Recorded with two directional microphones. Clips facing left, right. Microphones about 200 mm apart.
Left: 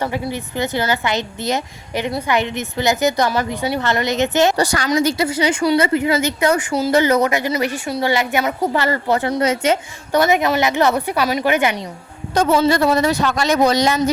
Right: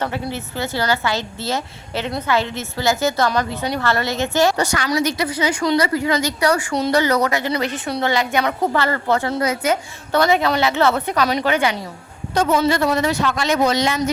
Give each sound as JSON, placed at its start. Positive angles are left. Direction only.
{"t": 0.0, "sound": "a woman's voice", "side_deg": 15}
{"t": 4.5, "sound": "speech", "side_deg": 35}
{"t": 4.9, "sound": "a woman's voice", "side_deg": 25}
{"t": 12.5, "sound": "speech", "side_deg": 35}